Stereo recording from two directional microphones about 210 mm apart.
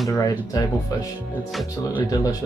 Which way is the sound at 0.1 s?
15° left (ahead or behind).